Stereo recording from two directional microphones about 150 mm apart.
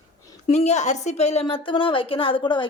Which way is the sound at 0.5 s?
50° left (ahead or behind).